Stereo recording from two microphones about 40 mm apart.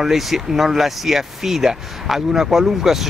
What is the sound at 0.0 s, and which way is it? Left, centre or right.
Speech, centre.